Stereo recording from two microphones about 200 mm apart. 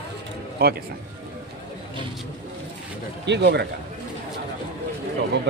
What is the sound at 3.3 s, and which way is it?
Speech, 60° right (ahead or behind).